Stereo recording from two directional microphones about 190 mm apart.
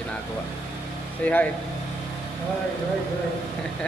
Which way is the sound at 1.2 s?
5° left (ahead or behind).